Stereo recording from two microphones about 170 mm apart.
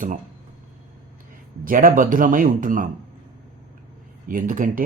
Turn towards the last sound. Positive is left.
turn(degrees=-55)  # may be behind; listen again after turning